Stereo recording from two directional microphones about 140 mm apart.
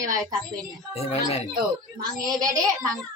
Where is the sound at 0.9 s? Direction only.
45° left (ahead or behind).